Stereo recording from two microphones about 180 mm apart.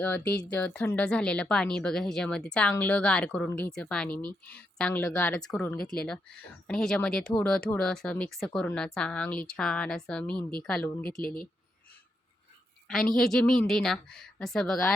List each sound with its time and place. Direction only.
0.0 s speech: 10° left (ahead or behind)
11.2 s speech: 25° right (ahead or behind)
13.1 s speech: centre (ahead or behind)